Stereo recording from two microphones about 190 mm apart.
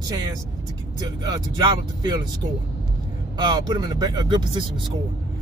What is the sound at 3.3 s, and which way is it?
Speech, 25° right (ahead or behind).